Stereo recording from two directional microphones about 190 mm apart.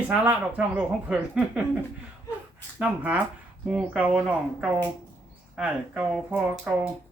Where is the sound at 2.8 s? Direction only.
5° right (ahead or behind).